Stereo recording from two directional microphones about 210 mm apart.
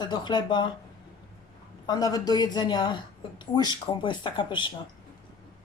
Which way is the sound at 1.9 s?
20° left (ahead or behind).